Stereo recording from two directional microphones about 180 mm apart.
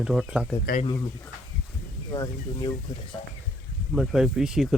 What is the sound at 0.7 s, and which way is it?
Speech, 55° left (ahead or behind).